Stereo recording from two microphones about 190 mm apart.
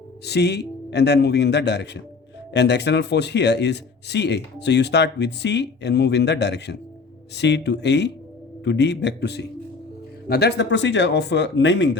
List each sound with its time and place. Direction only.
0.3 s speech: 60° left (ahead or behind)